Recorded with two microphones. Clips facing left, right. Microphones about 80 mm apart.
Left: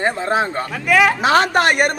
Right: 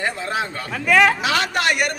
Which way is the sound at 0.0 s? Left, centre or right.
Left.